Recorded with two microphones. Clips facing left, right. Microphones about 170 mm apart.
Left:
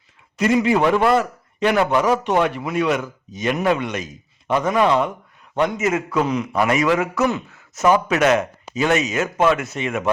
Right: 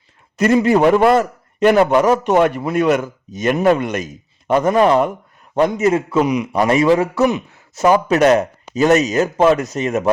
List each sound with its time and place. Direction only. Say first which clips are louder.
0.3 s a man's voice: right 4 dB; 45° right (ahead or behind)
5.5 s speech: right 5 dB; 35° right (ahead or behind)
6.2 s a man's voice: right 4 dB; 15° right (ahead or behind)
6.6 s speech: right 5 dB; 30° right (ahead or behind)